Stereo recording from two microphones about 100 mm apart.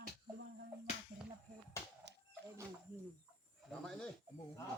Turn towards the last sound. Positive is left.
turn(degrees=5)  # may be behind; listen again after turning